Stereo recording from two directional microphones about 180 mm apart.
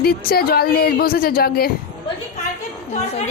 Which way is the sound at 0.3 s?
60° left (ahead or behind).